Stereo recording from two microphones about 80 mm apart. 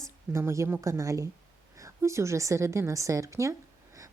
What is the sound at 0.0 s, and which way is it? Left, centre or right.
A woman's voice, right.